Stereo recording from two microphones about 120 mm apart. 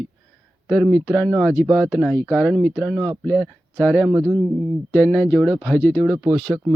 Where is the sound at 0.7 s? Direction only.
10° left (ahead or behind).